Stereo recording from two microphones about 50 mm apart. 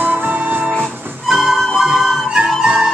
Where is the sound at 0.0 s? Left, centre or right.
Right.